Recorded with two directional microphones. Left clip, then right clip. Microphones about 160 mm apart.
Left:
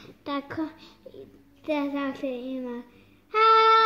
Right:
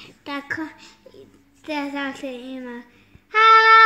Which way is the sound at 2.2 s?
60° left (ahead or behind).